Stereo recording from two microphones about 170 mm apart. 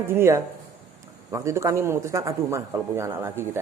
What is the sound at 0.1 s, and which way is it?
Speech, 15° right (ahead or behind).